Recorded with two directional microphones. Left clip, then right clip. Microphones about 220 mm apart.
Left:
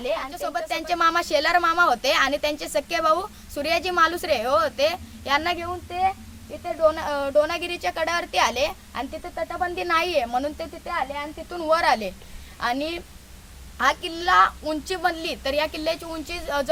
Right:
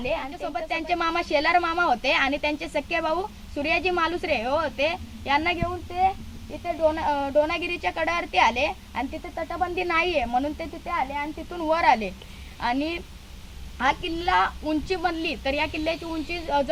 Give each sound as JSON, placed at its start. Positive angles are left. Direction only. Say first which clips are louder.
{"t": 0.0, "sound": "a woman's voice", "louder": "left 2 dB", "side_deg": 20}